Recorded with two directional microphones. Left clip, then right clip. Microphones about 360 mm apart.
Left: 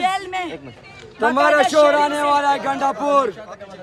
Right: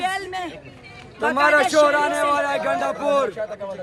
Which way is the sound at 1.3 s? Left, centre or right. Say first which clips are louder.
Left 1 dB; left.